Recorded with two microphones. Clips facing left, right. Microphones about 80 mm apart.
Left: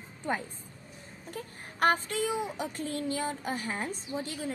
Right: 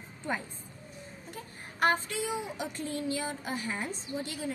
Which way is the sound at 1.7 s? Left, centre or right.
Left.